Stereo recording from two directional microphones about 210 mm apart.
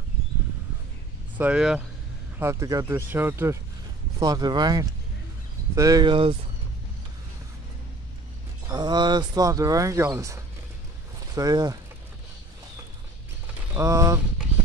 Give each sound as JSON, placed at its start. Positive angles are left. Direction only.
{"t": 1.4, "sound": "speech", "side_deg": -5}
{"t": 8.6, "sound": "speech", "side_deg": -20}
{"t": 13.7, "sound": "speech", "side_deg": -15}